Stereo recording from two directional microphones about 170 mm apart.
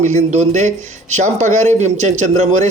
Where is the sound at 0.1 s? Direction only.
45° right (ahead or behind).